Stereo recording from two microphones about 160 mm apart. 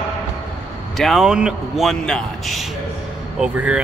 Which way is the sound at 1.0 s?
Centre (ahead or behind).